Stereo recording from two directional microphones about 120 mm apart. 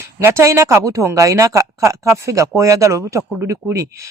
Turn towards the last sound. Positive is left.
turn(degrees=-25)  # may be behind; listen again after turning